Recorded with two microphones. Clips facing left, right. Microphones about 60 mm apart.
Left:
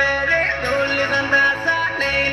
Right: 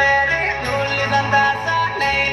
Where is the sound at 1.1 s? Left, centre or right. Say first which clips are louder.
Right 3 dB; left.